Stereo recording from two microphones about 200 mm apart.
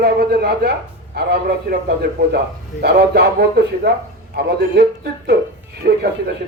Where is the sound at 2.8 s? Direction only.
55° right (ahead or behind).